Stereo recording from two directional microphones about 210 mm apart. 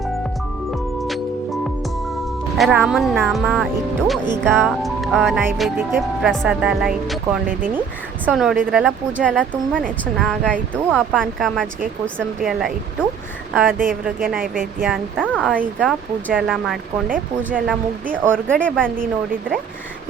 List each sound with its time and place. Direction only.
2.6 s speech: centre (ahead or behind)
14.3 s speech: 40° right (ahead or behind)
14.8 s speech: centre (ahead or behind)
18.3 s speech: 5° left (ahead or behind)